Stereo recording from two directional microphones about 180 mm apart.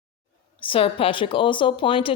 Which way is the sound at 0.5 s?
30° left (ahead or behind).